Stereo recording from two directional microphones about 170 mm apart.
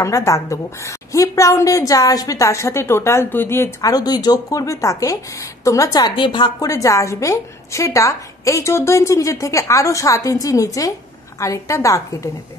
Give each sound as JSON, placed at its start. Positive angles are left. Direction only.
{"t": 0.0, "sound": "a woman's voice", "side_deg": 20}